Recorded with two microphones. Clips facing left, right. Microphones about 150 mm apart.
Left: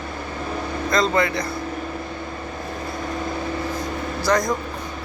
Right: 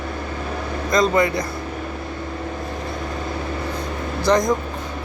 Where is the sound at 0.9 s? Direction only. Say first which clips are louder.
Right 3 dB; 15° right (ahead or behind).